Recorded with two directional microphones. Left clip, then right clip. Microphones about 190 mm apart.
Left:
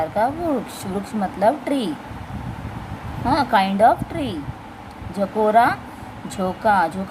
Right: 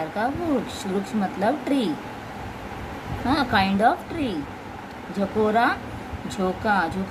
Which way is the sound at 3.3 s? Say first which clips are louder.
Left 4 dB; 20° left (ahead or behind).